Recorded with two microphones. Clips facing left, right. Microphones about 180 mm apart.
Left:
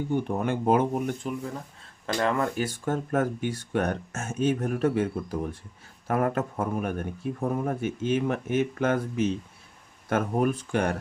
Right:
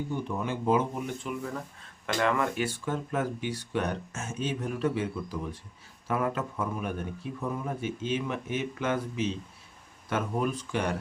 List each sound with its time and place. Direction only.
0.1 s speech: 55° left (ahead or behind)
2.1 s speech: 35° left (ahead or behind)
2.8 s speech: 50° left (ahead or behind)